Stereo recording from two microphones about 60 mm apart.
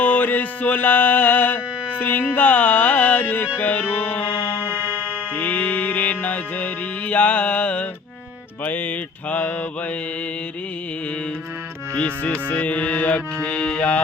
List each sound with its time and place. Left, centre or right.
0.0 s music: left
4.6 s music: right
5.3 s music: left
11.9 s music: centre